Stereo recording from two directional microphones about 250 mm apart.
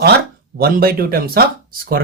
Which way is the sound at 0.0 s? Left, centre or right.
Right.